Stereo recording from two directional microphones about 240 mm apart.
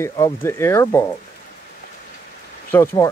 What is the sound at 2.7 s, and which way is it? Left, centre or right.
Speech, centre.